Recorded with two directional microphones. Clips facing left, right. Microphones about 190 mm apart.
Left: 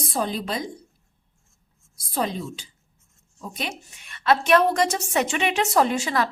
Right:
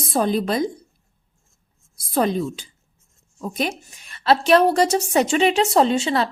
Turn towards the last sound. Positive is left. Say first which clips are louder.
# right 4 dB
turn(degrees=-25)  # may be behind; listen again after turning